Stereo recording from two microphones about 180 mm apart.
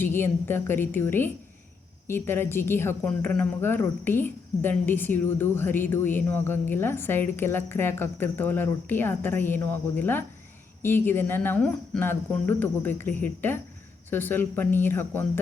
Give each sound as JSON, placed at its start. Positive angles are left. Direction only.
{"t": 0.0, "sound": "a woman's voice", "side_deg": 15}